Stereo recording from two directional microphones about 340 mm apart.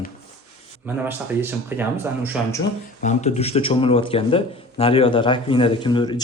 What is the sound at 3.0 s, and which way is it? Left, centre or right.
Speech, left.